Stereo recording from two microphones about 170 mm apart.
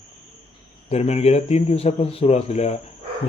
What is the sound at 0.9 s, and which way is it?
Speech, 40° left (ahead or behind).